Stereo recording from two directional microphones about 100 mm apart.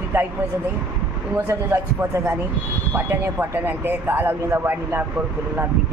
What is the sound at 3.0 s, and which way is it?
A woman's voice, 20° right (ahead or behind).